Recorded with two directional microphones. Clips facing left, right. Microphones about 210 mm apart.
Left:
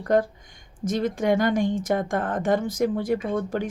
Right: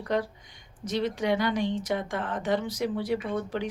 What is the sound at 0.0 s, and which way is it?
A woman's voice, 50° left (ahead or behind).